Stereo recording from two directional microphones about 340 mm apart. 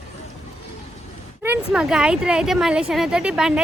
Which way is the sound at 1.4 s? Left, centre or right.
Centre.